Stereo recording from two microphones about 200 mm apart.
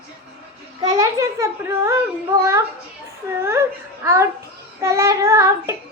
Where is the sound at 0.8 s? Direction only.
20° right (ahead or behind).